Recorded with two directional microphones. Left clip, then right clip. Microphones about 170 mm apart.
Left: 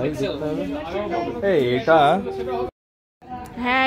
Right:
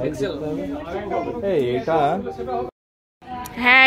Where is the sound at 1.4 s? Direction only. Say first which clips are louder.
Left 4 dB; 40° left (ahead or behind).